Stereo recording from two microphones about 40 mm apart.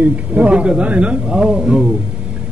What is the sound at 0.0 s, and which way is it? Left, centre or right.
Speech, right.